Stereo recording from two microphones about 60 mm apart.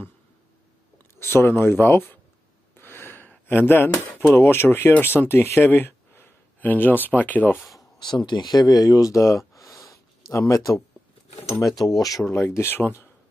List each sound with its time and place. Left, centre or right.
1.2 s speech: left
8.2 s speech: left
9.5 s sniff: left
10.5 s speech: left
11.8 s speech: left
12.3 s speech: left